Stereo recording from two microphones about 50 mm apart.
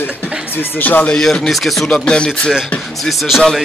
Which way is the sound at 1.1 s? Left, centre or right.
Centre.